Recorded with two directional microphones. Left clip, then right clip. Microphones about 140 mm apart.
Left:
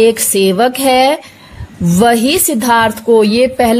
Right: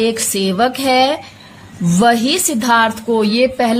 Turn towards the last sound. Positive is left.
turn(degrees=40)  # may be behind; listen again after turning